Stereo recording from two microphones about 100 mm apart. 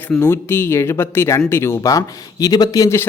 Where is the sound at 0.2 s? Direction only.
25° left (ahead or behind).